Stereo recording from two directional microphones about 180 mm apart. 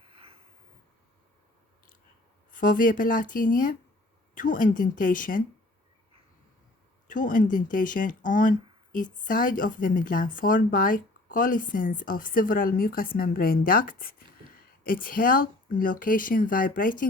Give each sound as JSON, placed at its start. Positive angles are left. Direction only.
{"t": 2.5, "sound": "speech", "side_deg": 50}
{"t": 7.1, "sound": "speech", "side_deg": 50}